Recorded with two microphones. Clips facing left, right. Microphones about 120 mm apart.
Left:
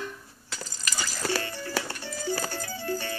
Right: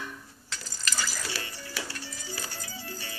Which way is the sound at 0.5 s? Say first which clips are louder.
Left 1 dB; 10° left (ahead or behind).